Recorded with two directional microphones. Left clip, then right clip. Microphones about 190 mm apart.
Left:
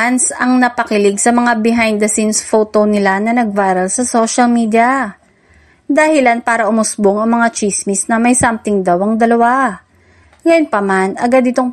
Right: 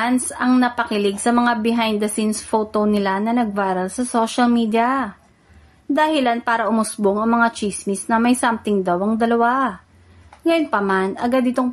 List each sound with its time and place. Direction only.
0.0 s a woman's voice: 30° left (ahead or behind)